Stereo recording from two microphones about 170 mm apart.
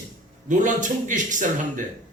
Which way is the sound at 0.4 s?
50° right (ahead or behind).